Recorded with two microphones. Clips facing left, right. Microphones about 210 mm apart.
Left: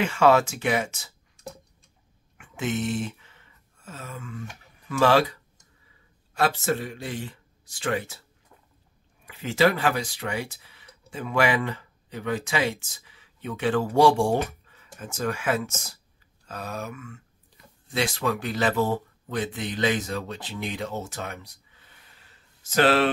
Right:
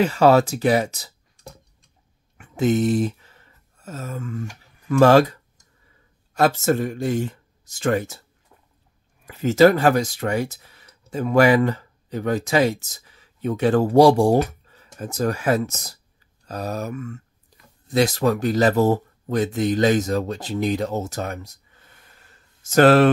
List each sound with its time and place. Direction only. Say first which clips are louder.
0.0 s speech: right 4 dB; 35° right (ahead or behind)
2.3 s a sound: right 9 dB; 40° right (ahead or behind)
6.3 s speech: right 6 dB; 45° right (ahead or behind)
9.2 s speech: right 8 dB; 40° right (ahead or behind)